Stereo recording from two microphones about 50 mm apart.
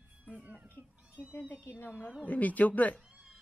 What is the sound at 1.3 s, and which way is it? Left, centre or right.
Speech, left.